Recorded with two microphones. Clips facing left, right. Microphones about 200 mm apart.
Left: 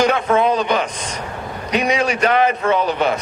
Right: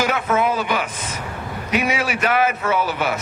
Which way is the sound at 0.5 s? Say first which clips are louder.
Left 4 dB; 20° left (ahead or behind).